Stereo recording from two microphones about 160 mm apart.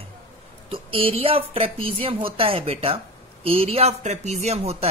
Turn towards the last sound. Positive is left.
turn(degrees=-40)  # may be behind; listen again after turning